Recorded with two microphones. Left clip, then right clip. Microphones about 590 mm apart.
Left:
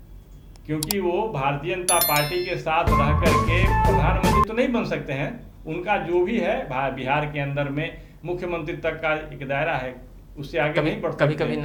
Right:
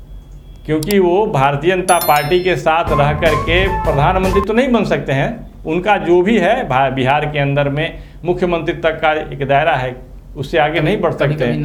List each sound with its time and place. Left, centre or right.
0.9 s speech: right
1.8 s a sound: centre
2.3 s speech: right
11.3 s speech: left